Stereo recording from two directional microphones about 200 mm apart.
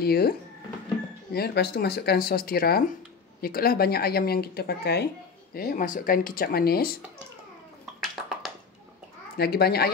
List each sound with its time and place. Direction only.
0.0 s speech: 50° left (ahead or behind)
1.3 s speech: 55° left (ahead or behind)
9.4 s speech: 50° left (ahead or behind)